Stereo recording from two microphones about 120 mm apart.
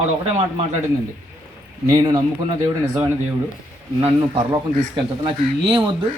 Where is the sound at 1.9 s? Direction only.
35° right (ahead or behind).